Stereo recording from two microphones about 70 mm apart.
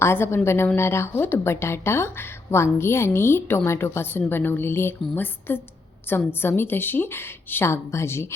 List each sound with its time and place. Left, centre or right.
0.0 s speech: left